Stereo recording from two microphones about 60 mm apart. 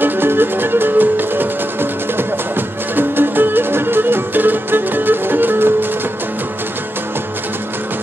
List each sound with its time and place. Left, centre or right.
0.0 s music: right